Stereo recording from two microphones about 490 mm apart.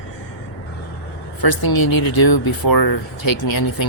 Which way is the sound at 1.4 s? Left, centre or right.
Left.